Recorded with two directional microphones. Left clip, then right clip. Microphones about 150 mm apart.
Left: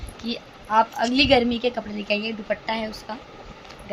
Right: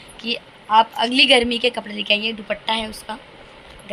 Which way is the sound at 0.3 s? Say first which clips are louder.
Right 6 dB; 5° right (ahead or behind).